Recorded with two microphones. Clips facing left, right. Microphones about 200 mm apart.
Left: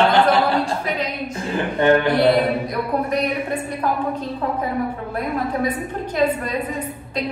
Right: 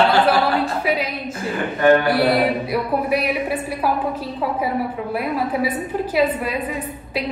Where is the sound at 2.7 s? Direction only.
5° right (ahead or behind).